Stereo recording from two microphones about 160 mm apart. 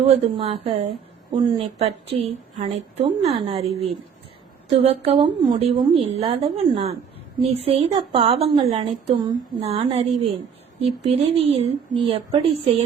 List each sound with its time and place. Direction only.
0.0 s a woman's voice: 40° right (ahead or behind)